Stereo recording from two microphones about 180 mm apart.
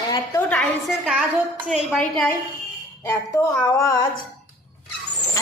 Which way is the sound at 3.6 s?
20° left (ahead or behind).